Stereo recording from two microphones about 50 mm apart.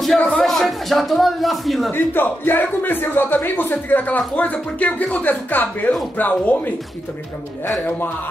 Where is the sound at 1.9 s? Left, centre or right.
Left.